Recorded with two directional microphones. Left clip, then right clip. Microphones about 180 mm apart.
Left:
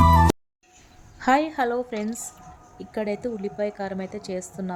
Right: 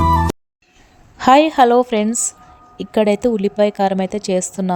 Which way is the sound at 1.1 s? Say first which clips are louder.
Right 11 dB; 45° right (ahead or behind).